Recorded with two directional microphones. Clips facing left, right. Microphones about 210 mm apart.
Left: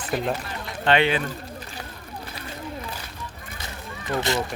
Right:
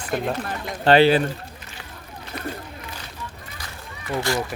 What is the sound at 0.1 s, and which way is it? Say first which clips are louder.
Speech: right 1 dB; 5° left (ahead or behind).